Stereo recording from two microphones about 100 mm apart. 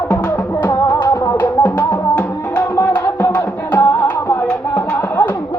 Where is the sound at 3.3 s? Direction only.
15° left (ahead or behind).